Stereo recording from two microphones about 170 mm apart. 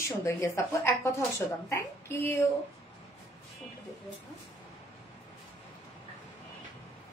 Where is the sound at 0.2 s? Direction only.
15° left (ahead or behind).